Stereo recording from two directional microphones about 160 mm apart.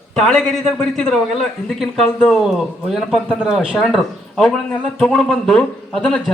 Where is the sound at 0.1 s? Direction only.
5° left (ahead or behind).